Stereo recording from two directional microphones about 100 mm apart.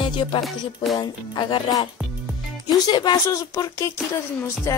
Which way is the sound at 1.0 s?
50° left (ahead or behind).